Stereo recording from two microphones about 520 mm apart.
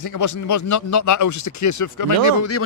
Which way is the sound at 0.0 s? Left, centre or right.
Left.